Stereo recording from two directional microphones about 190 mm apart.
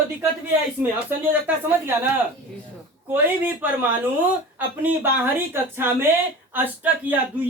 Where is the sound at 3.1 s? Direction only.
10° right (ahead or behind).